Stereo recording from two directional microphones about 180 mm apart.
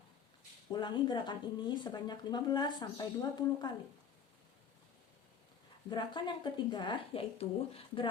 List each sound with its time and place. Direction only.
0.7 s speech: 25° left (ahead or behind)
5.9 s speech: 25° left (ahead or behind)